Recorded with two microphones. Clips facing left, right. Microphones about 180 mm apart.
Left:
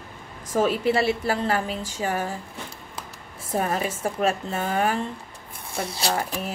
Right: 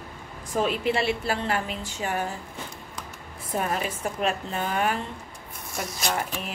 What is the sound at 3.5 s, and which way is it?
A woman's voice, 30° left (ahead or behind).